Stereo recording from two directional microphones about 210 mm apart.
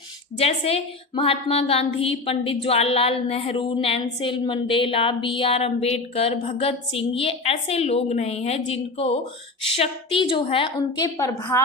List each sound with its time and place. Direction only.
0.3 s a woman's voice: 30° left (ahead or behind)